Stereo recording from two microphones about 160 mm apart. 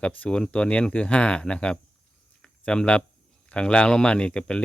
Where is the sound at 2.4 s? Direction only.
5° left (ahead or behind).